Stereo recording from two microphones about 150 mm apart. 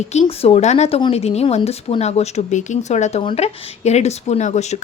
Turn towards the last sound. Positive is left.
turn(degrees=50)  # may be behind; listen again after turning